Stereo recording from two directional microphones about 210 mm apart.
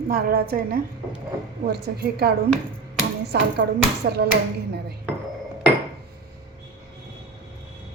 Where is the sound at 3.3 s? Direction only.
50° right (ahead or behind).